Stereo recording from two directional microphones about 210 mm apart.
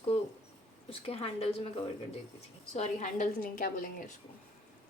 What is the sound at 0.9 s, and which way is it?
Speech, 30° left (ahead or behind).